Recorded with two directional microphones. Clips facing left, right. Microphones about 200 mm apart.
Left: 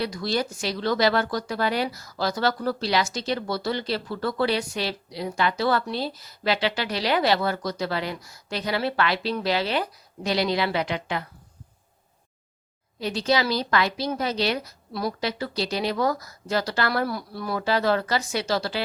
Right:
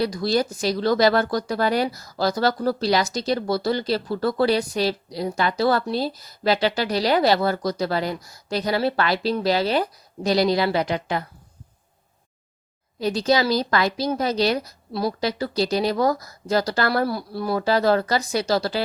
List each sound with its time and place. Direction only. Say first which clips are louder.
0.0 s speech: right 5 dB; 40° right (ahead or behind)
13.0 s speech: right 4 dB; 40° right (ahead or behind)